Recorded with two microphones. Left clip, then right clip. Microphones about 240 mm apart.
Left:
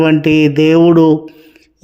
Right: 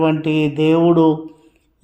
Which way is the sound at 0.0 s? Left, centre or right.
Left.